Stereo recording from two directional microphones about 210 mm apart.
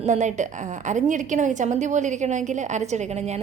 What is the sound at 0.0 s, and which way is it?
A woman's voice, 35° right (ahead or behind).